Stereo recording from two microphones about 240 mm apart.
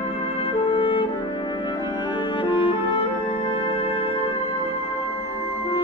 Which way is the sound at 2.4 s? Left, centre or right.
Left.